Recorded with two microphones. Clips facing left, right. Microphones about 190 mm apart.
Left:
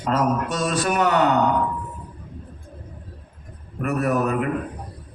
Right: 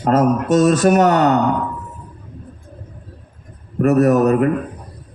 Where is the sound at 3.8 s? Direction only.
40° right (ahead or behind).